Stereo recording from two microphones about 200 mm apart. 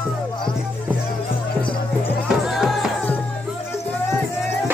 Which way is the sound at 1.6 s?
25° left (ahead or behind).